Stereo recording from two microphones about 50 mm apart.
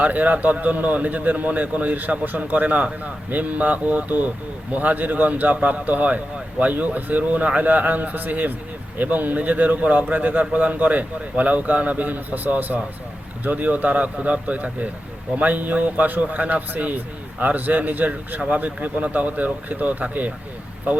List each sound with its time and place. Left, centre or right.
0.0 s a man's voice: right